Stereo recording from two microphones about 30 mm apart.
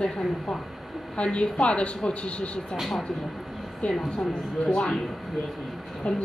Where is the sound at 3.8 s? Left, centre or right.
Left.